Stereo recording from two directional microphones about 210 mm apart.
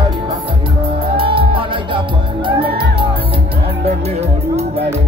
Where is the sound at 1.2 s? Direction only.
25° right (ahead or behind).